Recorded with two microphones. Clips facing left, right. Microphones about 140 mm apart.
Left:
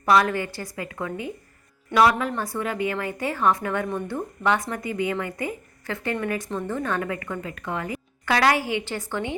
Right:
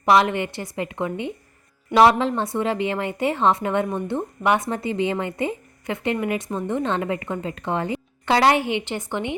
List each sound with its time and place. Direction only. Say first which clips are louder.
0.0 s a woman's voice: right 2 dB; 20° right (ahead or behind)